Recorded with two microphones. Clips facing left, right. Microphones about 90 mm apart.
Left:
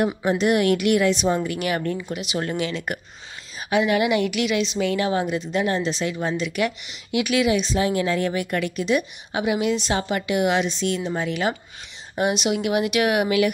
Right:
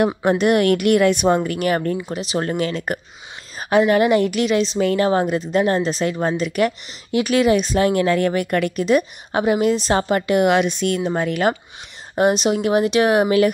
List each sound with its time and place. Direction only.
0.1 s a woman's voice: 55° right (ahead or behind)
12.2 s speech: 40° right (ahead or behind)